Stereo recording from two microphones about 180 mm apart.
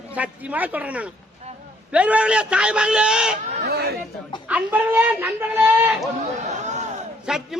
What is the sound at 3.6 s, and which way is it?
Speech, 60° right (ahead or behind).